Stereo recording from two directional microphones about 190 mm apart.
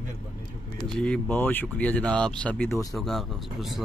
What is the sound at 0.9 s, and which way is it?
Speech, 5° left (ahead or behind).